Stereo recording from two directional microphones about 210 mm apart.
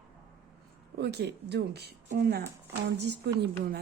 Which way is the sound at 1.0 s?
55° right (ahead or behind).